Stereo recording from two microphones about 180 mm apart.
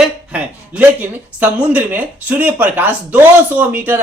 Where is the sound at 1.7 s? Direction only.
10° right (ahead or behind).